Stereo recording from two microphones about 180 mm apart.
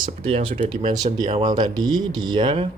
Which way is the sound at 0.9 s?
20° right (ahead or behind).